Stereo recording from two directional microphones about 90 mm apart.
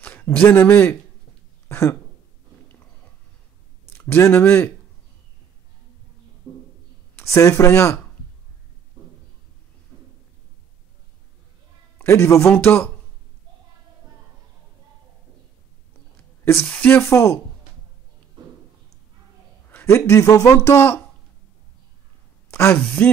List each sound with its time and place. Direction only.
0.0 s a man's voice: 20° left (ahead or behind)
1.7 s a sound: 30° left (ahead or behind)
3.9 s a sound: 20° left (ahead or behind)
4.2 s speech: 25° left (ahead or behind)
7.2 s speech: 30° left (ahead or behind)
12.0 s speech: 30° left (ahead or behind)
16.6 s speech: 15° left (ahead or behind)
17.1 s speech: 35° left (ahead or behind)
19.8 s speech: 30° left (ahead or behind)
20.7 s speech: 30° left (ahead or behind)
22.5 s a sound: 30° left (ahead or behind)
23.0 s speech: 20° left (ahead or behind)